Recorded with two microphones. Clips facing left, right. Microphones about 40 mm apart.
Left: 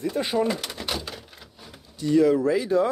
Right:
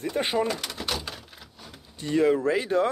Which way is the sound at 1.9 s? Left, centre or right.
Right.